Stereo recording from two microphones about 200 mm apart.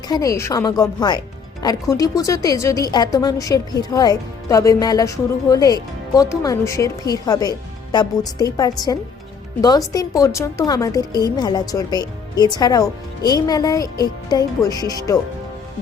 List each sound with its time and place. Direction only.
0.1 s a woman's voice: 15° left (ahead or behind)